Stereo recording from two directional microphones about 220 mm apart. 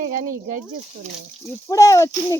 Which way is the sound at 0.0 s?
40° right (ahead or behind).